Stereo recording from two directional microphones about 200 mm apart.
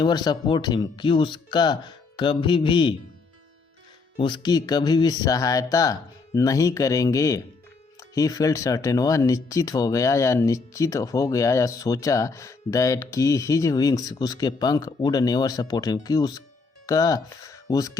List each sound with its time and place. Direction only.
0.0 s speech: 20° left (ahead or behind)
4.2 s speech: 20° left (ahead or behind)